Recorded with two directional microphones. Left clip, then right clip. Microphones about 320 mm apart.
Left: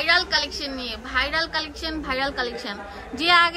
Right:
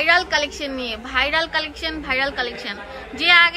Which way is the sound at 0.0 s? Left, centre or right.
Centre.